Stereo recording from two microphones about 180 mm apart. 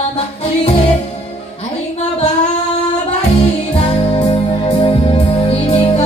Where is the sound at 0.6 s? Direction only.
40° left (ahead or behind).